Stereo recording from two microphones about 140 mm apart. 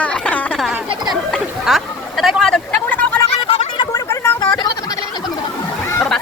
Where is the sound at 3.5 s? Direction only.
40° left (ahead or behind).